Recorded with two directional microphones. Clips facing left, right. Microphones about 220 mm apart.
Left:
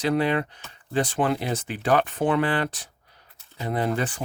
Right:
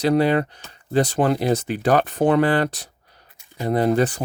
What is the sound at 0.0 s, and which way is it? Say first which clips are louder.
Speech: right 5 dB; 40° right (ahead or behind).